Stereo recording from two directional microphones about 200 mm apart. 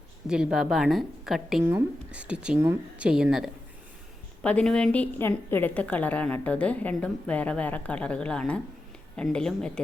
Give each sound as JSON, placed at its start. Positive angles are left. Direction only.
{"t": 0.3, "sound": "a woman's voice", "side_deg": -5}